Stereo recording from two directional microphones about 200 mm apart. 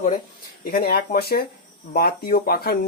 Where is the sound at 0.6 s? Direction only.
50° left (ahead or behind).